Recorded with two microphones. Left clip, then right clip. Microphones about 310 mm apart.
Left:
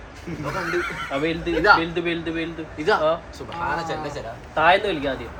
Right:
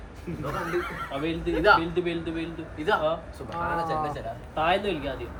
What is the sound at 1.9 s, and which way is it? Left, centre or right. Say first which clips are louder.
Speech: left 4 dB; centre.